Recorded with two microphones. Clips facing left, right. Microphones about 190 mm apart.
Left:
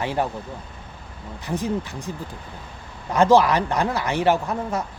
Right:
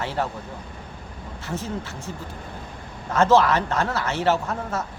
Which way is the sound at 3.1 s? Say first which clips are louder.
Left 2 dB; 15° left (ahead or behind).